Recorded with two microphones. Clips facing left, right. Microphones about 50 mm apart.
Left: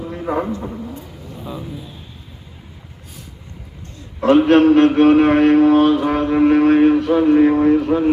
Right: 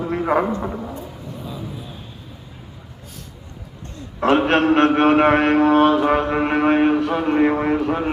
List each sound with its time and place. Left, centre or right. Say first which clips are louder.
0.1 s a man's voice: right 3 dB; right
4.3 s mantra: left 5 dB; right